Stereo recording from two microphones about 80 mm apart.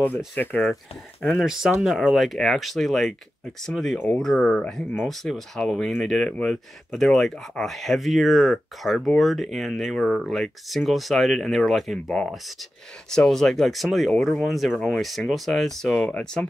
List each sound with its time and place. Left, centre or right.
0.4 s speech: left
1.2 s speech: centre